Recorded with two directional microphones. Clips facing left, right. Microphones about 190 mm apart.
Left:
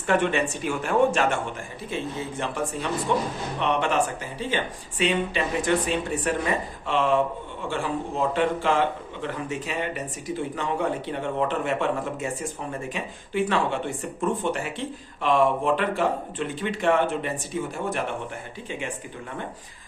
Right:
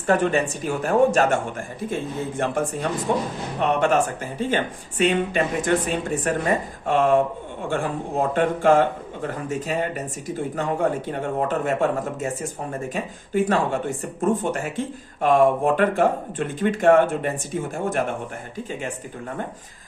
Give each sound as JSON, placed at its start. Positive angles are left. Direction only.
{"t": 0.1, "sound": "speech", "side_deg": -40}